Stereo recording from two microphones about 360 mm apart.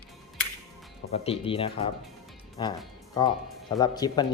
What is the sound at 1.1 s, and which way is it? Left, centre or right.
Speech, centre.